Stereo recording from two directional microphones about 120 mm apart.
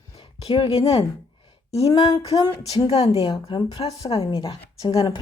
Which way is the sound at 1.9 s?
35° left (ahead or behind).